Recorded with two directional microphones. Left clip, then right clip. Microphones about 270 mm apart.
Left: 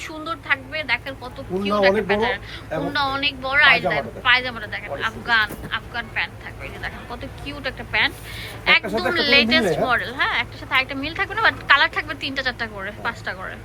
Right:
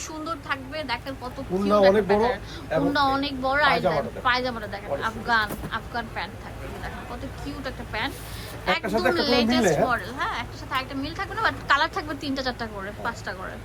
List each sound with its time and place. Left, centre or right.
0.1 s a woman's voice: centre
2.1 s a woman's voice: centre
7.4 s a woman's voice: centre
9.1 s a woman's voice: centre